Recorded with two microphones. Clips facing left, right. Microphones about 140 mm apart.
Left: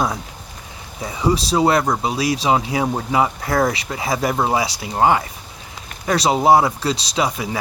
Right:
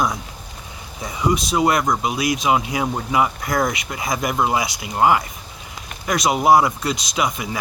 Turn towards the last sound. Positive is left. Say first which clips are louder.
# left 2 dB
turn(degrees=30)  # may be behind; listen again after turning